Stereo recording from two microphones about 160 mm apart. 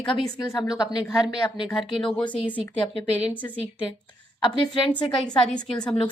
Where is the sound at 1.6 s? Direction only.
5° left (ahead or behind).